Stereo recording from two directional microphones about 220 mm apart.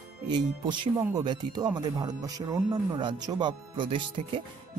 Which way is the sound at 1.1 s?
20° right (ahead or behind).